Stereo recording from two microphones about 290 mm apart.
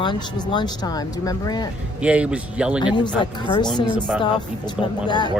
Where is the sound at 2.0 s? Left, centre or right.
Centre.